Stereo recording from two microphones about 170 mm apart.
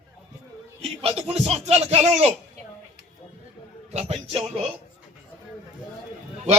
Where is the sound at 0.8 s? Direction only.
35° right (ahead or behind).